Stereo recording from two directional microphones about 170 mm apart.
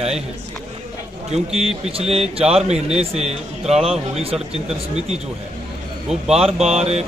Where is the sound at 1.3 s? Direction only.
35° right (ahead or behind).